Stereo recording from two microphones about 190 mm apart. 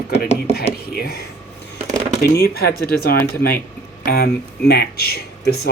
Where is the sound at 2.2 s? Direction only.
55° left (ahead or behind).